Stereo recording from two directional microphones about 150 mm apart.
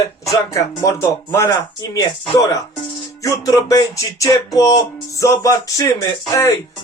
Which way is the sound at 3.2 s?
20° left (ahead or behind).